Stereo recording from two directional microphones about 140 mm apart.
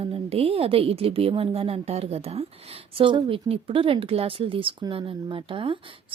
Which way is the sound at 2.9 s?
35° right (ahead or behind).